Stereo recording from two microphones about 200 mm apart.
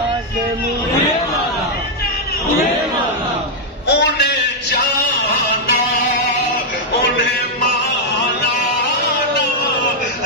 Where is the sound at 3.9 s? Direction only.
55° left (ahead or behind).